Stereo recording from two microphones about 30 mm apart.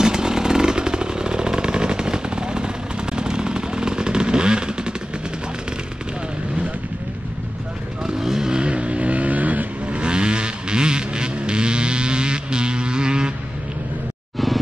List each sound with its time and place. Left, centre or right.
0.0 s vehicle: right
8.1 s vehicle: centre
8.5 s music: right
8.7 s vehicle: right
9.9 s vehicle: right